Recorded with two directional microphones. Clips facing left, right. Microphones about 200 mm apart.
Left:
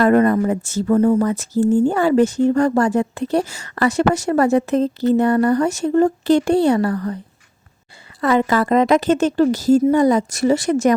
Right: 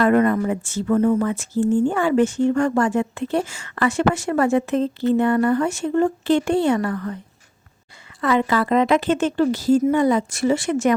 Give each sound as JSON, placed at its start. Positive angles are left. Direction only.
{"t": 0.0, "sound": "speech", "side_deg": 40}
{"t": 8.2, "sound": "speech", "side_deg": 40}